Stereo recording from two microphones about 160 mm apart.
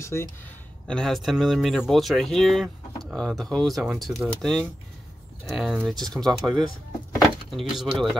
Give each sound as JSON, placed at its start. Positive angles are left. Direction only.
{"t": 0.0, "sound": "speech", "side_deg": 15}
{"t": 0.8, "sound": "speech", "side_deg": 5}